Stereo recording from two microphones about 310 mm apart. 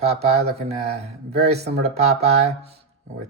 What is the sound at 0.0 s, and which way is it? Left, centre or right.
Speech, centre.